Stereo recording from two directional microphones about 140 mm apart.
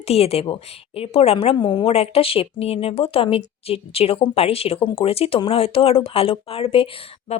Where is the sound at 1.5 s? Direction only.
35° left (ahead or behind).